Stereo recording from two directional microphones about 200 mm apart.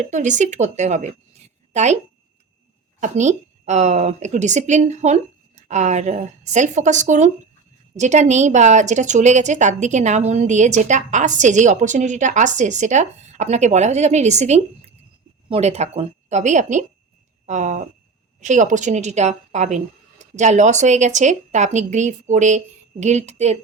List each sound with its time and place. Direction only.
0.0 s a woman's voice: 35° right (ahead or behind)
3.0 s a woman's voice: 35° right (ahead or behind)